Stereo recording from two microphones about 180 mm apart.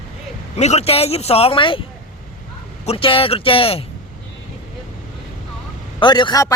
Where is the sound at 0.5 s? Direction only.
35° left (ahead or behind).